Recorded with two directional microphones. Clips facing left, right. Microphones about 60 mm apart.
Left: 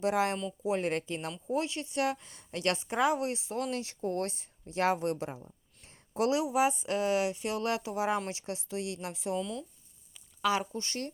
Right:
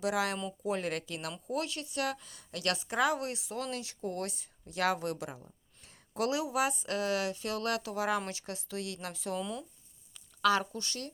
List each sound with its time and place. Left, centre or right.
0.0 s a woman's voice: left
9.4 s speech: centre
10.4 s speech: centre
10.8 s speech: left